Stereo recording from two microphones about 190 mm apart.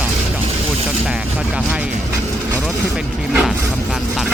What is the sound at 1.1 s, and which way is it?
Vehicle, 5° right (ahead or behind).